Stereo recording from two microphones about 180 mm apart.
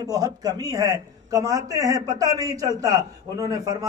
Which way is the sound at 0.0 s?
20° right (ahead or behind).